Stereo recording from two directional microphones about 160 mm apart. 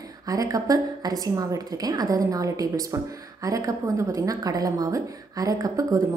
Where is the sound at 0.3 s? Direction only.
20° right (ahead or behind).